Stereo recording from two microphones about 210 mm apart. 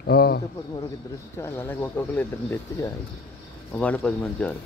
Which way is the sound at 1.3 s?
10° left (ahead or behind).